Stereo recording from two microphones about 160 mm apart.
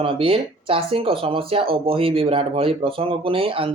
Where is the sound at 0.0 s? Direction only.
35° right (ahead or behind).